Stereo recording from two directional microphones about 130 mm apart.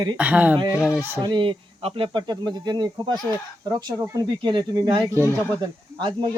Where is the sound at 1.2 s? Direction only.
40° right (ahead or behind).